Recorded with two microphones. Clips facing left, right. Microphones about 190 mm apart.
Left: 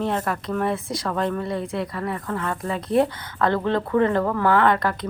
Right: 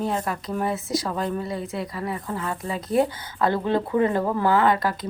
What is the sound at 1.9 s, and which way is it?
Speech, 25° right (ahead or behind).